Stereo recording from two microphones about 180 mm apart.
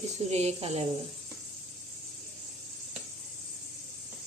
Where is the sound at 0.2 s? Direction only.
35° right (ahead or behind).